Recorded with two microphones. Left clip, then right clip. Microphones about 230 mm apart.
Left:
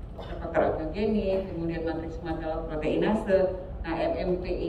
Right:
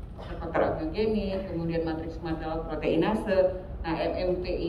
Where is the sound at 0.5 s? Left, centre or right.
Centre.